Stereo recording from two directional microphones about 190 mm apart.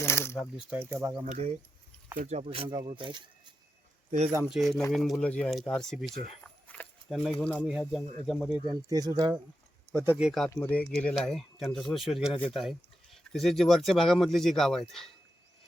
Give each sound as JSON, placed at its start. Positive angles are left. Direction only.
{"t": 0.0, "sound": "a sound", "side_deg": 15}
{"t": 0.9, "sound": "speech", "side_deg": -15}
{"t": 1.2, "sound": "speech", "side_deg": -35}
{"t": 4.4, "sound": "speech", "side_deg": 0}
{"t": 6.4, "sound": "a sound", "side_deg": 5}
{"t": 7.6, "sound": "speech", "side_deg": -5}
{"t": 8.6, "sound": "speech", "side_deg": -20}